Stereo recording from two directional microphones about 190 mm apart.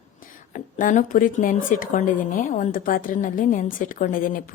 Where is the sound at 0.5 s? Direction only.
40° left (ahead or behind).